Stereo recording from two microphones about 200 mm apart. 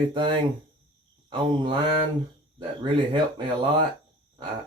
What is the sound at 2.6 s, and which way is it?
Speech, 25° right (ahead or behind).